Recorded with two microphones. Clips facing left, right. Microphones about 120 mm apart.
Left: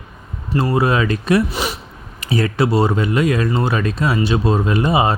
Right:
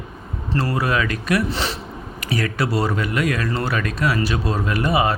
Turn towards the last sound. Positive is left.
turn(degrees=25)  # may be behind; listen again after turning